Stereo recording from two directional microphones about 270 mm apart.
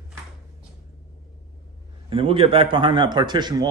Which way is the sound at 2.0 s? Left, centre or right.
Centre.